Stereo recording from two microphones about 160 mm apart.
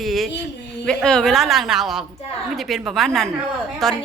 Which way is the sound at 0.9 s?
5° left (ahead or behind).